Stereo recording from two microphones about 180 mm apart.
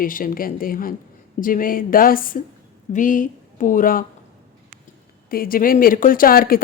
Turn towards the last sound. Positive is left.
turn(degrees=55)  # may be behind; listen again after turning